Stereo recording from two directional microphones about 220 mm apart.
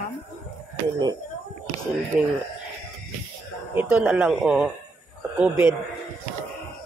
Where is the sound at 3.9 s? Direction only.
5° right (ahead or behind).